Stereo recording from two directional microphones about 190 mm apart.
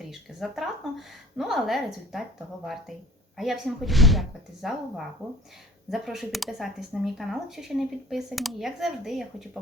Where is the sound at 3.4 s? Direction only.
Centre (ahead or behind).